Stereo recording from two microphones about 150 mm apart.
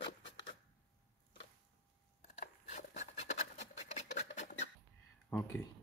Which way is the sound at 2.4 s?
55° left (ahead or behind).